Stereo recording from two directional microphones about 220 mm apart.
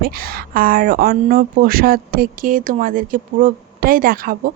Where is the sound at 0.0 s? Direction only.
45° right (ahead or behind).